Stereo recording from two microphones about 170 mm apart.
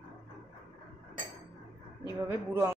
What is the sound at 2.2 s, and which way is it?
Speech, 15° right (ahead or behind).